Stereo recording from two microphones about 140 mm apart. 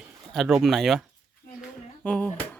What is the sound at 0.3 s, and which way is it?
Speech, centre (ahead or behind).